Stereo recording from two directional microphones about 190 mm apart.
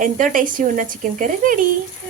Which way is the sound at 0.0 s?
45° right (ahead or behind).